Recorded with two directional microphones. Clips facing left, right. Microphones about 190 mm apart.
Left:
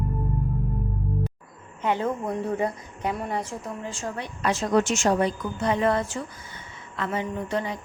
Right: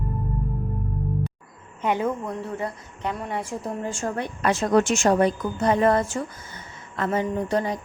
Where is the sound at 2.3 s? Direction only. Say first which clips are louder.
Left 3 dB; 15° left (ahead or behind).